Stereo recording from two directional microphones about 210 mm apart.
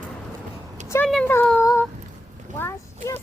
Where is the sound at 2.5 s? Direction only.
10° left (ahead or behind).